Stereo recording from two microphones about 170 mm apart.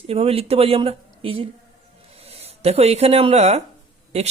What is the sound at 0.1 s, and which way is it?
Speech, 35° right (ahead or behind).